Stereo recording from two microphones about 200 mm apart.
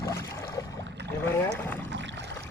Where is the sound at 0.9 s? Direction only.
60° right (ahead or behind).